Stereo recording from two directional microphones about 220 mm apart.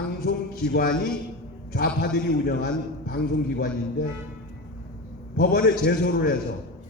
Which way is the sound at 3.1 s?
45° left (ahead or behind).